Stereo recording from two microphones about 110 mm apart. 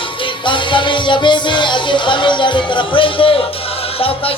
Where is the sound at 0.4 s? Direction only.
45° left (ahead or behind).